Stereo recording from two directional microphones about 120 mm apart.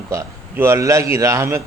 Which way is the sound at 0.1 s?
20° right (ahead or behind).